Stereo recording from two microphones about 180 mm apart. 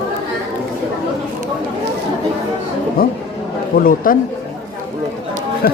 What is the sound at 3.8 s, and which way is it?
Speech, 50° left (ahead or behind).